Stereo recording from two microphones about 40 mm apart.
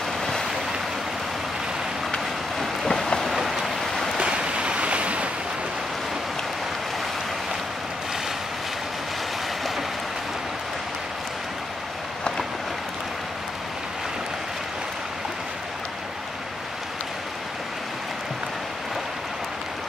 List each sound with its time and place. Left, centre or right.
0.2 s waves: centre
2.6 s vehicle: centre
3.3 s rain: centre
3.9 s waves: centre
4.2 s waves: right